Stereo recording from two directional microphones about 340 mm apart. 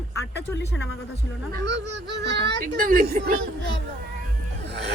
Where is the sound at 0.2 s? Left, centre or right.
Left.